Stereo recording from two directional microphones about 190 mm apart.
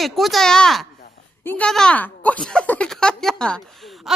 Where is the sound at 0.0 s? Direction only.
Centre (ahead or behind).